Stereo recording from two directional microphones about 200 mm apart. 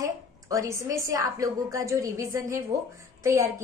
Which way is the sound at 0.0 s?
15° right (ahead or behind).